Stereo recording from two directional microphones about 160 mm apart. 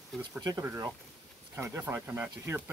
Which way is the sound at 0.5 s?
20° right (ahead or behind).